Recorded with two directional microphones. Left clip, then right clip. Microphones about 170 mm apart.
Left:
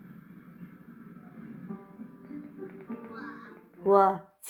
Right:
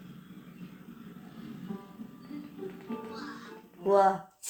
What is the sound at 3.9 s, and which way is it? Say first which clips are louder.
Speech: left 2 dB; 15° left (ahead or behind).